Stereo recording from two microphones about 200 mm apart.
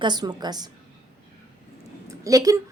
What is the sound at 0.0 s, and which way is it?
Speech, 20° right (ahead or behind).